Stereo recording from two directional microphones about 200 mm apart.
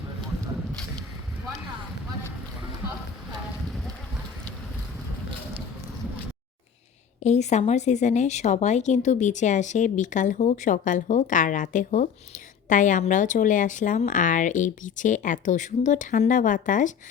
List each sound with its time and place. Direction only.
7.2 s speech: 35° left (ahead or behind)